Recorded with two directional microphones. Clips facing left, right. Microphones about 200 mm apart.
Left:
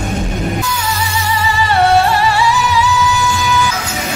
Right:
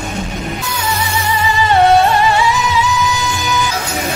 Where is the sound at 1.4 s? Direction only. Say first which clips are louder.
Right 2 dB; 20° right (ahead or behind).